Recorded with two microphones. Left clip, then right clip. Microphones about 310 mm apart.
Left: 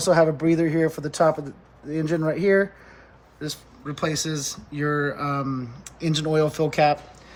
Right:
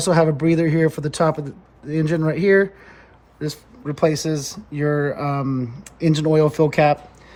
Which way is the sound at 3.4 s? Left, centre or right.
Right.